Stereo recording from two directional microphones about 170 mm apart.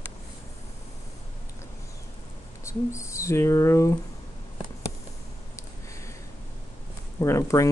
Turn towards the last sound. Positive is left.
turn(degrees=15)  # may be behind; listen again after turning